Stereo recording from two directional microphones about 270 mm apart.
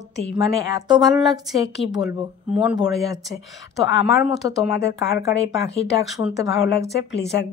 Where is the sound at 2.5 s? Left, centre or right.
Centre.